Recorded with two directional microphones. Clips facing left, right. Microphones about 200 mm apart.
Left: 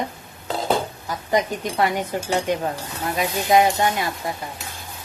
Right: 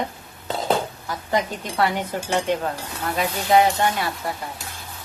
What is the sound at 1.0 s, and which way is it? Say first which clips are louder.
A woman's voice: left 2 dB; 20° left (ahead or behind).